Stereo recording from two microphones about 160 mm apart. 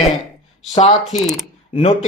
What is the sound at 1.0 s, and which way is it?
Speech, centre (ahead or behind).